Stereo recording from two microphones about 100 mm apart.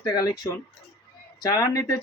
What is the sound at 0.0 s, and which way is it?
Speech, 40° left (ahead or behind).